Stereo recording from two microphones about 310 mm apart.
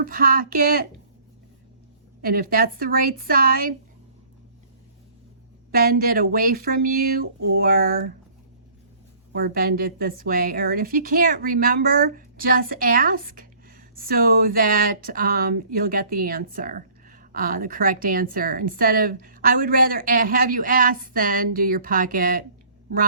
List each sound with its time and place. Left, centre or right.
0.0 s a woman's voice: right
2.2 s a woman's voice: right
5.7 s a woman's voice: right
9.3 s a woman's voice: right